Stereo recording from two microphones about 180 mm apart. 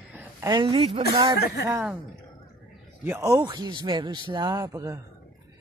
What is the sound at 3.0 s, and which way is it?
A man's voice, 15° right (ahead or behind).